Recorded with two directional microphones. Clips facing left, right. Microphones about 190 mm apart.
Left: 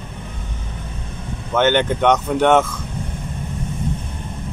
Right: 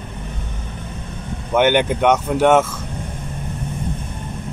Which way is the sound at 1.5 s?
10° right (ahead or behind).